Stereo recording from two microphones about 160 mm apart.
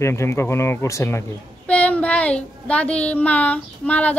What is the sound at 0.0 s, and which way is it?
Speech, 15° left (ahead or behind).